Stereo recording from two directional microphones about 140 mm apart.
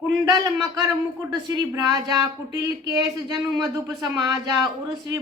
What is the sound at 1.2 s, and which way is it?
A woman's voice, 25° right (ahead or behind).